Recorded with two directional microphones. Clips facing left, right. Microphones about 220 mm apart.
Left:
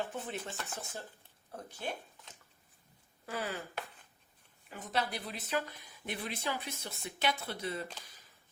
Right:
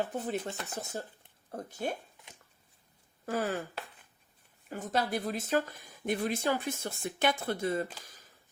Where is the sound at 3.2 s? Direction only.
45° right (ahead or behind).